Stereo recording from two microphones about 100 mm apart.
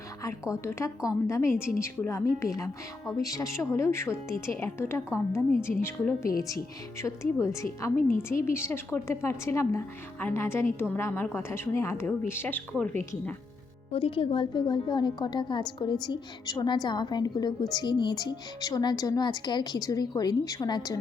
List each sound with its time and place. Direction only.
0.2 s a woman's voice: 30° left (ahead or behind); by 12.9 s 15° left (ahead or behind)
13.9 s a woman's voice: 65° left (ahead or behind); by 21.0 s 40° left (ahead or behind)